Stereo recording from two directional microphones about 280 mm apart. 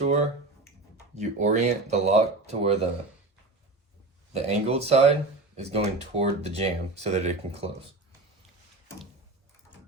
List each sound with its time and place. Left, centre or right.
0.0 s finger snapping: right
1.1 s speech: right
4.3 s speech: right